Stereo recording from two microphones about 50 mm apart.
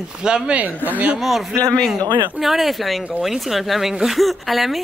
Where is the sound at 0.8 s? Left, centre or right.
Right.